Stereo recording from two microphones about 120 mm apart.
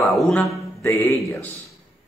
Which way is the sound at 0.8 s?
20° left (ahead or behind).